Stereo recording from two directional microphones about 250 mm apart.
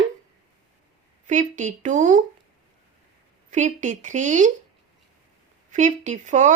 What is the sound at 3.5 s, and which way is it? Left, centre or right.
Speech, right.